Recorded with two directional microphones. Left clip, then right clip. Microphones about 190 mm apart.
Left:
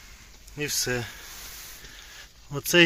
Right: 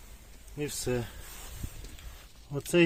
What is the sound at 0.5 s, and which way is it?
Speech, centre (ahead or behind).